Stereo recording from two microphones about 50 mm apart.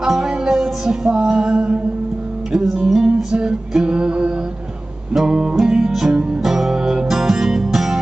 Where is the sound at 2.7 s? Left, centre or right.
Centre.